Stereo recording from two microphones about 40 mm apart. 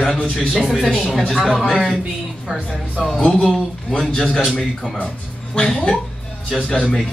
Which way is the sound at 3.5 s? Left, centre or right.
Centre.